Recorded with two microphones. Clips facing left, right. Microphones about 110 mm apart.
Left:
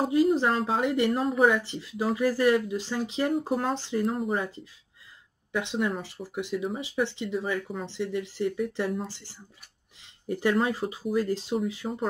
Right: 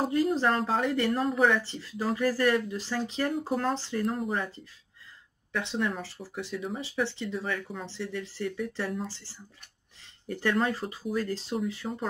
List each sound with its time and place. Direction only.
0.1 s speech: 15° left (ahead or behind)
0.5 s speech: centre (ahead or behind)
0.7 s speech: 15° left (ahead or behind)
1.2 s speech: 5° left (ahead or behind)
3.7 s speech: 15° left (ahead or behind)
4.0 s speech: 5° left (ahead or behind)
5.5 s speech: 15° left (ahead or behind)